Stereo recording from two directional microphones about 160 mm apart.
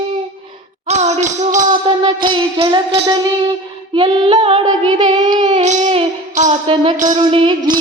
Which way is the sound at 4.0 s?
30° right (ahead or behind).